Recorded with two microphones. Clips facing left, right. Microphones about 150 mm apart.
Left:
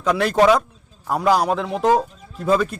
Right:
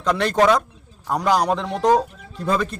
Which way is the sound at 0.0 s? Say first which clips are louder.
Left 2 dB; 5° left (ahead or behind).